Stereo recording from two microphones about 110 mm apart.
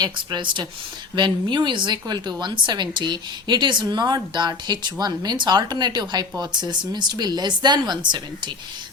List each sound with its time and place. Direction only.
0.0 s speech: 40° right (ahead or behind)